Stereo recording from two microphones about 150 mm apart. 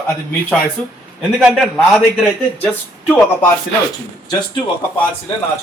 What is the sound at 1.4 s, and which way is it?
Speech, centre (ahead or behind).